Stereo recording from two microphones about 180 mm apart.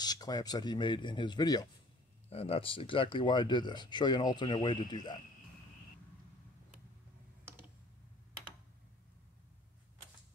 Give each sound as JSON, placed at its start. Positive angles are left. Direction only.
{"t": 0.0, "sound": "speech", "side_deg": 20}
{"t": 2.2, "sound": "speech", "side_deg": 35}